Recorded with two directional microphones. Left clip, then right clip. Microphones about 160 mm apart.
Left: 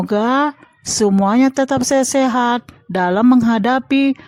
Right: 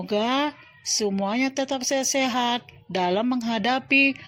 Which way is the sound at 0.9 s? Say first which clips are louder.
Left 10 dB; 50° left (ahead or behind).